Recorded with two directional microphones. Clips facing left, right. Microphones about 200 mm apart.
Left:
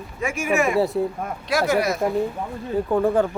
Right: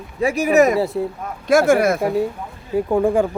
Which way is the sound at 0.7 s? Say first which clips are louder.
Even; centre (ahead or behind).